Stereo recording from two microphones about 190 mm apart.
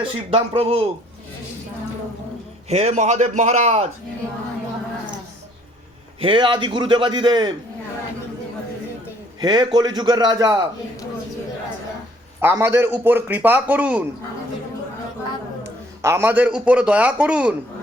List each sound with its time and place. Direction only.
0.0 s a man's voice: 30° right (ahead or behind)
2.6 s a man's voice: 35° right (ahead or behind)
6.2 s a man's voice: 25° right (ahead or behind)
9.4 s a man's voice: 25° right (ahead or behind)
12.4 s a man's voice: 10° right (ahead or behind)
16.0 s a man's voice: 15° right (ahead or behind)